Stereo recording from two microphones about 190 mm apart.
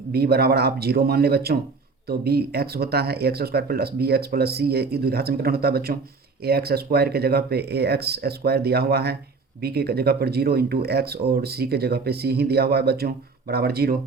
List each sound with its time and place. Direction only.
0.1 s speech: 55° right (ahead or behind)